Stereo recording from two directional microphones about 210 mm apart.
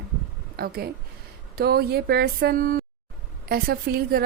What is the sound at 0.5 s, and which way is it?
A woman's voice, 45° right (ahead or behind).